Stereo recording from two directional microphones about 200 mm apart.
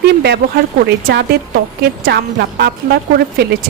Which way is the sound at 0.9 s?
55° right (ahead or behind).